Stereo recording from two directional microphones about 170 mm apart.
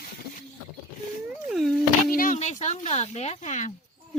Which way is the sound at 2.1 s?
50° left (ahead or behind).